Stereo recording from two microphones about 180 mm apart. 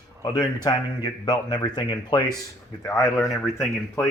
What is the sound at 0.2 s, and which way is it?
Speech, 20° left (ahead or behind).